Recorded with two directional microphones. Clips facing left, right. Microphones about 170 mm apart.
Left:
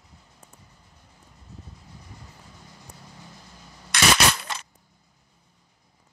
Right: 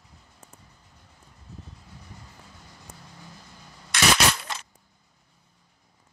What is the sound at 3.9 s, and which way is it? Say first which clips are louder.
Coin: left 1 dB; 75° left (ahead or behind).